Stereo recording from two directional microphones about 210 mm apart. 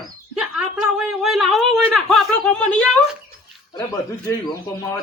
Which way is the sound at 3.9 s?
15° left (ahead or behind).